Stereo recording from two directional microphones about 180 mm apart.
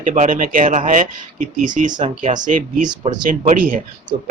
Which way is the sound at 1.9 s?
25° right (ahead or behind).